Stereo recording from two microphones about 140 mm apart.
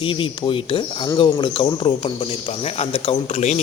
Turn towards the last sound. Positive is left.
turn(degrees=50)  # may be behind; listen again after turning